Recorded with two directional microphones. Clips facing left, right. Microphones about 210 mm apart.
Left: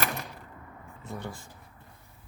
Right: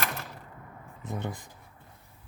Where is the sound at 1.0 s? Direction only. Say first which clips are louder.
Right 3 dB; 20° right (ahead or behind).